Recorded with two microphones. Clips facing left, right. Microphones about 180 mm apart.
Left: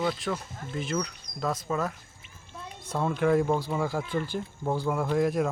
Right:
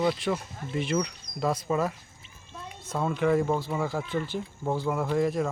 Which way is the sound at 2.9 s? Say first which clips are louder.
Even; centre (ahead or behind).